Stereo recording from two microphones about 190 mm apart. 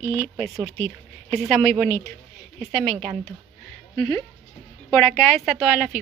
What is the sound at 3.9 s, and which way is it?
Speech, 15° left (ahead or behind).